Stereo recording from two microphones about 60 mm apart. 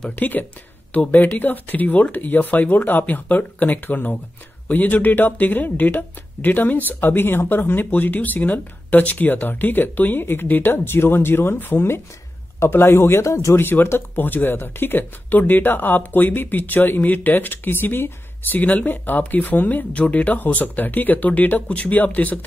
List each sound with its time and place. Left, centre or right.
0.1 s a man's voice: left
13.2 s speech: left
13.6 s speech: left
18.6 s speech: left